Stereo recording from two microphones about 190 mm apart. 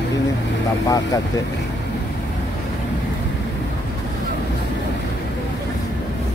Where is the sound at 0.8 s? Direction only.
20° left (ahead or behind).